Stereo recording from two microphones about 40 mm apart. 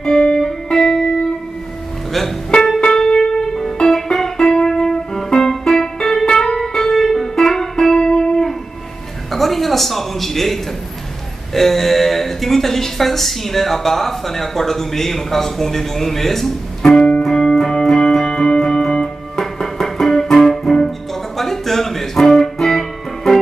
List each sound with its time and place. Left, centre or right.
0.0 s music: centre
3.2 s music: centre
9.3 s a sound: centre
11.5 s a woman's voice: centre
17.2 s music: centre